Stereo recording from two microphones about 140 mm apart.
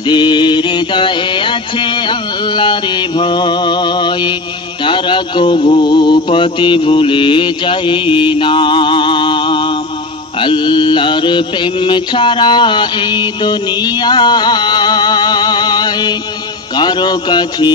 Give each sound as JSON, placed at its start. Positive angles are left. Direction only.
{"t": 0.0, "sound": "mantra", "side_deg": 35}